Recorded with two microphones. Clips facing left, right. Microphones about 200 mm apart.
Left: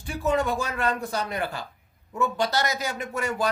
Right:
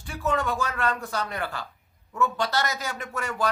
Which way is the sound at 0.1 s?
15° left (ahead or behind).